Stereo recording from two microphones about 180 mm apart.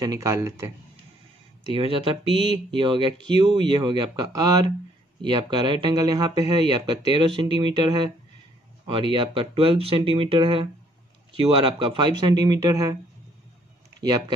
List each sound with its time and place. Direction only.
0.0 s speech: 20° right (ahead or behind)
1.7 s speech: 30° right (ahead or behind)